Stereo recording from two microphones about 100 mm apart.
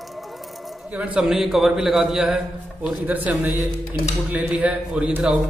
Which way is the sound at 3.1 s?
15° right (ahead or behind).